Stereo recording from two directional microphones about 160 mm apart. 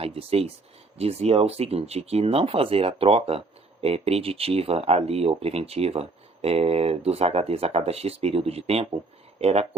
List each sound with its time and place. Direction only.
0.0 s speech: 35° right (ahead or behind)